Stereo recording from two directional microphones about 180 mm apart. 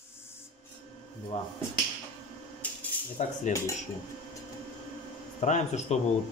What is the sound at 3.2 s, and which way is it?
Speech, 40° left (ahead or behind).